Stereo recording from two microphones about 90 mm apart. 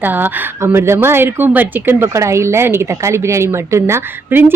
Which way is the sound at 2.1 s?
35° right (ahead or behind).